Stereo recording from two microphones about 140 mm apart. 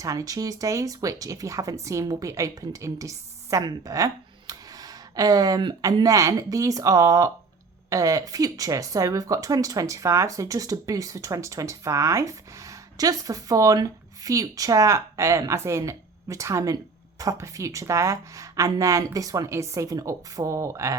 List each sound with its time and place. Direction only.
0.0 s speech: 25° right (ahead or behind)